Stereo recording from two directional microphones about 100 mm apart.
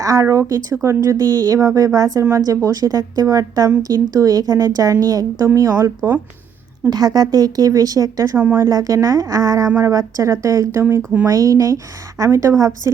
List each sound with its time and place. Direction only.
0.0 s a woman's voice: 35° right (ahead or behind)